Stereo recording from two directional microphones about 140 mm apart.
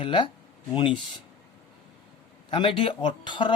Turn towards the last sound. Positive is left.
turn(degrees=35)  # may be behind; listen again after turning